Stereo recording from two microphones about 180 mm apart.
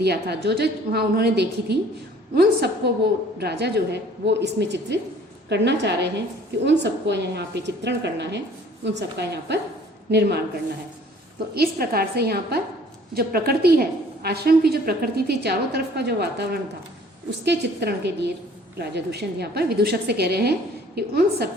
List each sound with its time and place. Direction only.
0.0 s a woman's voice: 65° right (ahead or behind)
11.5 s a woman's voice: 60° right (ahead or behind)